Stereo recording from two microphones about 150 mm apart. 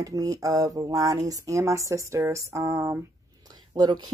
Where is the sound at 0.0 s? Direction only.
20° right (ahead or behind).